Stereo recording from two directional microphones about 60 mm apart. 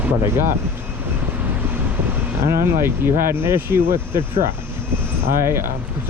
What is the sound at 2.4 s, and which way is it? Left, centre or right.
Speech, right.